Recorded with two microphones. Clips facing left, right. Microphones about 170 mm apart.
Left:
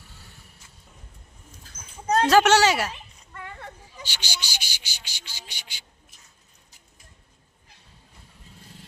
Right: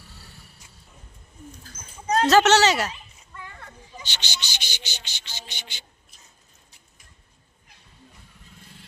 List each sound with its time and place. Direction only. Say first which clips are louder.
2.2 s cricket: right 1 dB; 10° left (ahead or behind)
3.3 s a sound: left 3 dB; 60° left (ahead or behind)
4.0 s cricket: left 1 dB; 10° left (ahead or behind)